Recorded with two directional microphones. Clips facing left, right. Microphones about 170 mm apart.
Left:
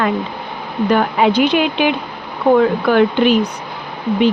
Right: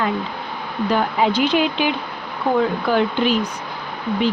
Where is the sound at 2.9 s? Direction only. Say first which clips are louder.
Left 6 dB; 65° left (ahead or behind).